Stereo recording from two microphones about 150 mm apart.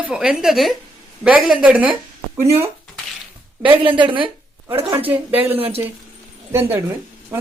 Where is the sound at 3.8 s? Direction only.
35° right (ahead or behind).